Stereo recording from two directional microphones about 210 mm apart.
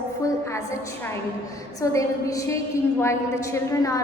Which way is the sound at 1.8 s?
15° left (ahead or behind).